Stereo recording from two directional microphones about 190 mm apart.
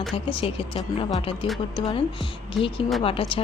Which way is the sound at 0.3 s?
30° left (ahead or behind).